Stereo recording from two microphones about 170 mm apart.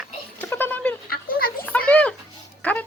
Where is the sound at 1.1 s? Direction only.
60° left (ahead or behind).